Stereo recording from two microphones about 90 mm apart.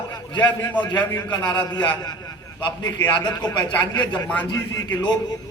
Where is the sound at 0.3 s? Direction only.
55° left (ahead or behind).